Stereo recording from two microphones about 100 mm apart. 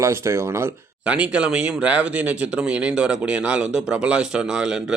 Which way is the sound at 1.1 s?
10° right (ahead or behind).